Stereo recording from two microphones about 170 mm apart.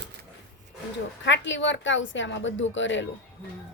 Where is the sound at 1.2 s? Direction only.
90° left.